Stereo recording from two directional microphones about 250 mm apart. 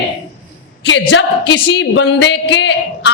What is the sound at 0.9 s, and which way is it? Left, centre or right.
A man's voice, left.